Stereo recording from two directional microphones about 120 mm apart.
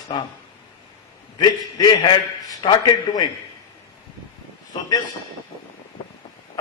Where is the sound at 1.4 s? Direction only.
35° left (ahead or behind).